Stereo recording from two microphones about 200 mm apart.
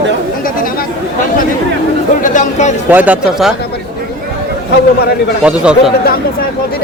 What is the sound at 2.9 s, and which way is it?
Speech, 5° right (ahead or behind).